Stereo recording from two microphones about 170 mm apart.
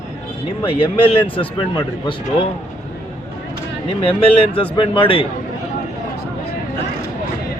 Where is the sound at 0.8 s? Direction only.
30° left (ahead or behind).